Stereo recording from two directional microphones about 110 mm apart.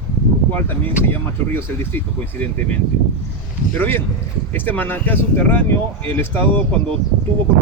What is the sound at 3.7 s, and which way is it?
Speech, 15° left (ahead or behind).